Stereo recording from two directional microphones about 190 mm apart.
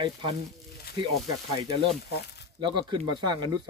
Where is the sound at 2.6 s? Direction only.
25° right (ahead or behind).